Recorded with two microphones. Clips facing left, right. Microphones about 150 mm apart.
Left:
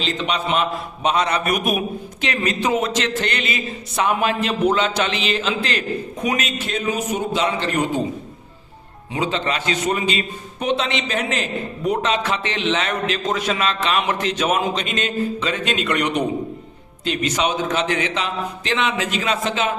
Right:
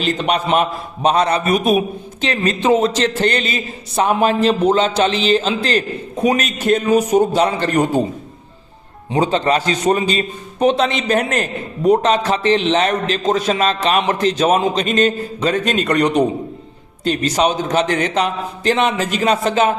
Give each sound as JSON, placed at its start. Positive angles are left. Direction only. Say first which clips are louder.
{"t": 0.0, "sound": "a man's voice", "louder": "right 5 dB", "side_deg": -50}
{"t": 9.1, "sound": "a man's voice", "louder": "right 7 dB", "side_deg": -40}